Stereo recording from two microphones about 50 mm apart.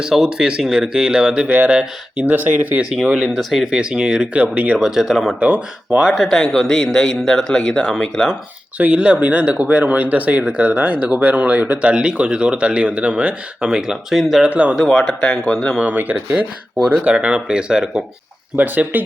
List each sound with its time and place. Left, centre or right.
0.0 s speech: centre
2.2 s speech: right
2.9 s speech: centre
4.8 s speech: centre
5.4 s speech: right
6.1 s speech: centre
8.8 s speech: right
13.9 s speech: centre
14.4 s speech: right
14.8 s speech: centre
15.9 s speech: right
17.0 s speech: right
18.5 s speech: right